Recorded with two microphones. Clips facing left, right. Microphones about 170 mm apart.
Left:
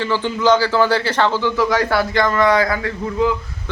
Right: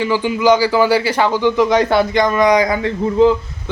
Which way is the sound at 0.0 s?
10° right (ahead or behind).